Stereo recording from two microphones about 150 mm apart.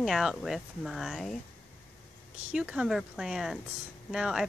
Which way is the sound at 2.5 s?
5° right (ahead or behind).